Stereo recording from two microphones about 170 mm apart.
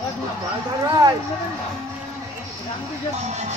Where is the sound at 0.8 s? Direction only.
20° right (ahead or behind).